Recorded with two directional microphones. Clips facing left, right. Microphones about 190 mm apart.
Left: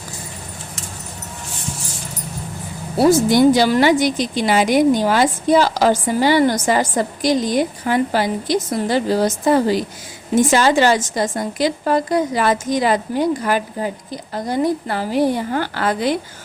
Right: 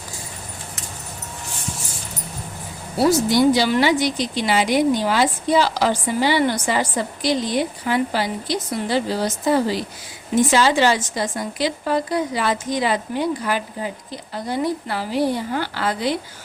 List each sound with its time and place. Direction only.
3.1 s a woman's voice: 50° left (ahead or behind)